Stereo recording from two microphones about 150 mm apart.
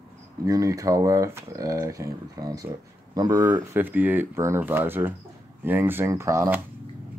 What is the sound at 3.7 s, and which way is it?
Speech, 10° right (ahead or behind).